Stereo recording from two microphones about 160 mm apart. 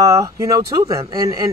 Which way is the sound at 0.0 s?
20° right (ahead or behind).